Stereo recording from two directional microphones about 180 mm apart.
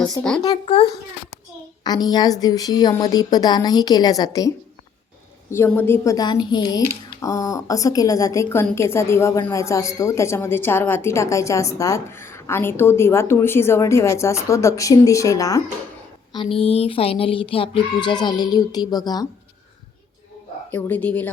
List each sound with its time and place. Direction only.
0.4 s a child's voice: 25° left (ahead or behind)
16.3 s speech: 30° left (ahead or behind)
20.7 s a woman's voice: 10° left (ahead or behind)